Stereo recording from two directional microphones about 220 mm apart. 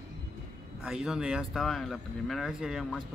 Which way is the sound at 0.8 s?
Centre (ahead or behind).